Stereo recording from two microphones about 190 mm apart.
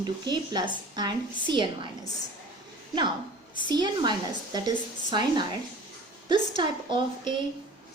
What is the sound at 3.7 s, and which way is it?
A woman's voice, 20° right (ahead or behind).